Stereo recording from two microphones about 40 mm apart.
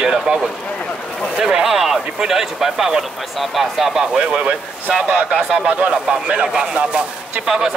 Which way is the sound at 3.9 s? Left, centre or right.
Centre.